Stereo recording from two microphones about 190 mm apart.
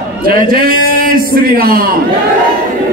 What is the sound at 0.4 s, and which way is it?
A man's voice, 50° right (ahead or behind).